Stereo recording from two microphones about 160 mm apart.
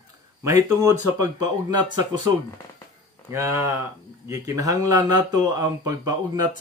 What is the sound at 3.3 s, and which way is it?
Speech, 20° right (ahead or behind).